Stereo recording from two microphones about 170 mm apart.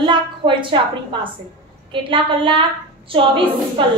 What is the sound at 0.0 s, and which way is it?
Speech, 30° right (ahead or behind).